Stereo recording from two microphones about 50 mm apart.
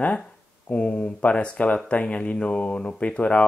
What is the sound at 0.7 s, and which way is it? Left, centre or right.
Speech, left.